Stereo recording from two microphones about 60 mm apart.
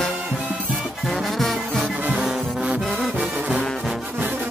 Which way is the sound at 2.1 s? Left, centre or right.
Centre.